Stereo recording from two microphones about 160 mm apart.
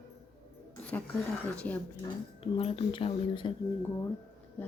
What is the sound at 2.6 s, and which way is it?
Speech, 35° left (ahead or behind).